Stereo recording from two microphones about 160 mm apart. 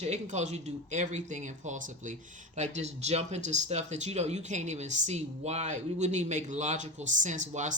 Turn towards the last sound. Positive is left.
turn(degrees=-50)  # may be behind; listen again after turning